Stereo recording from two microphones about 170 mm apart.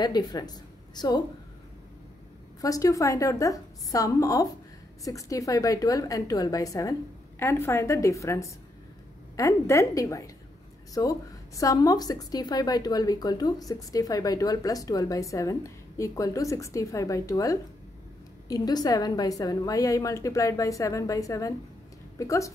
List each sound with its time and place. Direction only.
0.0 s a woman's voice: 25° left (ahead or behind)
2.6 s a woman's voice: 20° left (ahead or behind)